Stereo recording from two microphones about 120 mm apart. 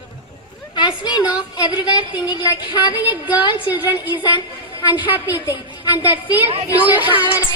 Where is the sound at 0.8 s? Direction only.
40° left (ahead or behind).